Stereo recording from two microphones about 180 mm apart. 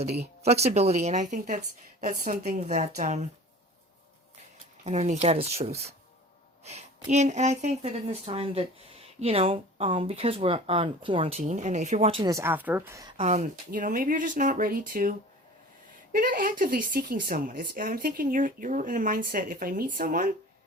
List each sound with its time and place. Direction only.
0.4 s speech: 35° right (ahead or behind)
4.8 s speech: 40° right (ahead or behind)
12.2 s a woman's voice: 15° right (ahead or behind)
13.1 s speech: 40° right (ahead or behind)
13.7 s speech: 50° right (ahead or behind)
16.1 s speech: 50° right (ahead or behind)